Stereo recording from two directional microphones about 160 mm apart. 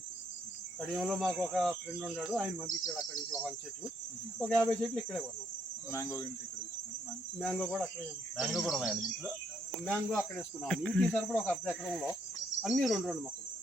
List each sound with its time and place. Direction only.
0.8 s speech: centre (ahead or behind)
4.4 s speech: 5° left (ahead or behind)
5.9 s speech: 20° left (ahead or behind)
7.3 s speech: centre (ahead or behind)
9.8 s speech: 10° left (ahead or behind)